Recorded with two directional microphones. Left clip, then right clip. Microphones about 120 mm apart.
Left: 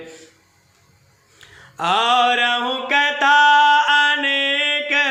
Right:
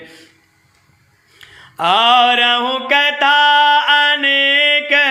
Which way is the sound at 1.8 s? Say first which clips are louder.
Right 5 dB; 25° right (ahead or behind).